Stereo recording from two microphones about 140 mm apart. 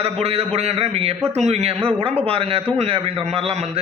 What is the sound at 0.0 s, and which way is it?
A man's voice, 45° right (ahead or behind).